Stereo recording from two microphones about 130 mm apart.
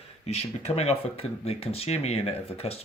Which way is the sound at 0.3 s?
55° left (ahead or behind).